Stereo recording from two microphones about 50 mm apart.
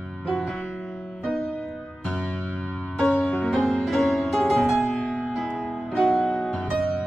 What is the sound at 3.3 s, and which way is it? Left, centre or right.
Music, centre.